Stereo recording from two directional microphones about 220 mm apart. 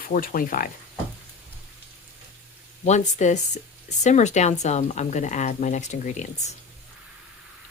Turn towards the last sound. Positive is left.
turn(degrees=35)  # may be behind; listen again after turning